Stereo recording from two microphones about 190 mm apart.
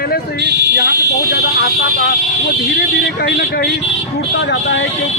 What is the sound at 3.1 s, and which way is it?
A man's voice, 55° left (ahead or behind).